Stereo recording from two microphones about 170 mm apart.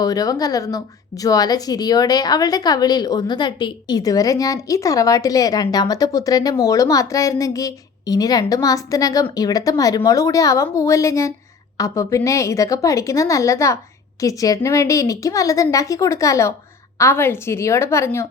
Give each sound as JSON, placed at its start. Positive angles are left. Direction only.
{"t": 0.0, "sound": "a woman's voice", "side_deg": 20}